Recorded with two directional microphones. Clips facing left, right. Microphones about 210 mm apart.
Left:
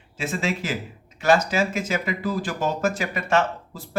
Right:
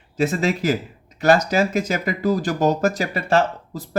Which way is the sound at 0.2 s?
40° right (ahead or behind).